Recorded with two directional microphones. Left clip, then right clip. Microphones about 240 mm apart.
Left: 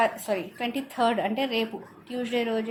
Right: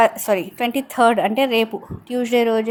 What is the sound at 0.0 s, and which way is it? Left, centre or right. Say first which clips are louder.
A woman's voice: right 9 dB; right.